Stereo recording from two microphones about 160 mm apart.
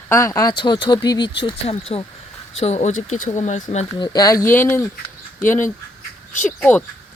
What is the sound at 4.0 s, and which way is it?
Speech, 25° left (ahead or behind).